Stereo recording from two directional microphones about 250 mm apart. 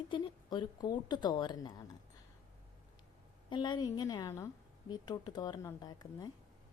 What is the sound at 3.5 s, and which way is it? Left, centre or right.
A woman's voice, centre.